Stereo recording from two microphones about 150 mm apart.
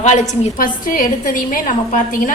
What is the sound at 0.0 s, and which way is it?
A woman's voice, 50° left (ahead or behind).